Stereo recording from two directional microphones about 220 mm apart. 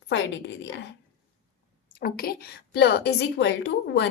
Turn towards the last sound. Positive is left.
turn(degrees=50)  # may be behind; listen again after turning